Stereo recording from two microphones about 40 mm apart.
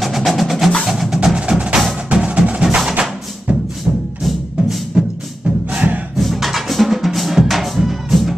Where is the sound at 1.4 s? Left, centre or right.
Right.